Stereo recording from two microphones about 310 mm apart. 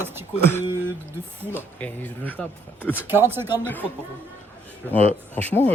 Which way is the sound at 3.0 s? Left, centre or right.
Centre.